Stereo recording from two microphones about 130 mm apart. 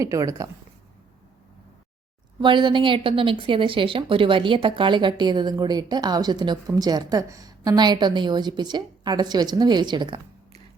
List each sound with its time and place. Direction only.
0.0 s a woman's voice: 25° right (ahead or behind)
2.4 s speech: 35° right (ahead or behind)